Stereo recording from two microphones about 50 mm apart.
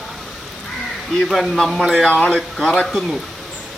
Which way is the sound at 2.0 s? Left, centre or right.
Left.